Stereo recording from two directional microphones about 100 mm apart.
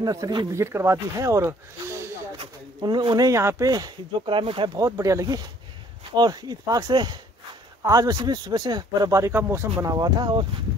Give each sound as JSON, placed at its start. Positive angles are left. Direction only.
{"t": 0.0, "sound": "speech", "side_deg": -35}
{"t": 0.5, "sound": "speech", "side_deg": -25}
{"t": 2.3, "sound": "pigeon", "side_deg": -50}
{"t": 3.3, "sound": "speech", "side_deg": -30}
{"t": 4.3, "sound": "speech", "side_deg": -60}
{"t": 4.7, "sound": "speech", "side_deg": -35}
{"t": 9.3, "sound": "speech", "side_deg": -25}
{"t": 9.8, "sound": "speech", "side_deg": -40}